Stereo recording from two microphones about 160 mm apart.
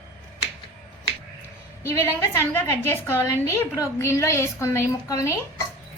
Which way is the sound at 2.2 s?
15° left (ahead or behind).